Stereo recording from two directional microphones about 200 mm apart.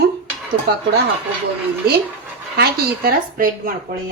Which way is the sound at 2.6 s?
50° right (ahead or behind).